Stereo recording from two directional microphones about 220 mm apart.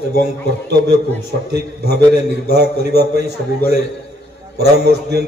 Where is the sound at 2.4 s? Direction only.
45° right (ahead or behind).